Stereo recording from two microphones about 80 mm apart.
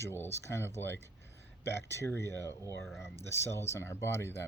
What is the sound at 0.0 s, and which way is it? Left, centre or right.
Speech, left.